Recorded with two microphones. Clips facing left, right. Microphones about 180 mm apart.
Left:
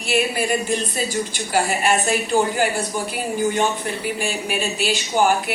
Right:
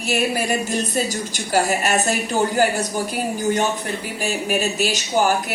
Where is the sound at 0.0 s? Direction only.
40° right (ahead or behind).